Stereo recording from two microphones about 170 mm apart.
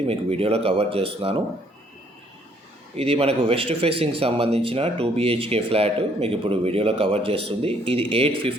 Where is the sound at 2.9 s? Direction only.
35° right (ahead or behind).